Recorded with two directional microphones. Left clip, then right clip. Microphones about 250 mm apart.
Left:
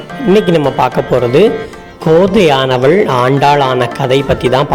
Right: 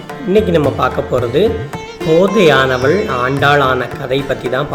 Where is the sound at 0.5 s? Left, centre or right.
Left.